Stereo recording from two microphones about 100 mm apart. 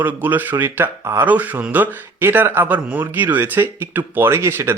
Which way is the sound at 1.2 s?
15° right (ahead or behind).